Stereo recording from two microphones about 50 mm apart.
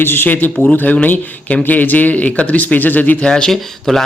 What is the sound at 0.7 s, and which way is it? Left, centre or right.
Speech, left.